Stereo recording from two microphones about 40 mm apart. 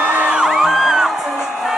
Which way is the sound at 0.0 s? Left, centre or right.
Right.